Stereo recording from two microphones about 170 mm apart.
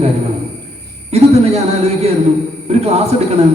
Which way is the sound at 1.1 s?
40° right (ahead or behind).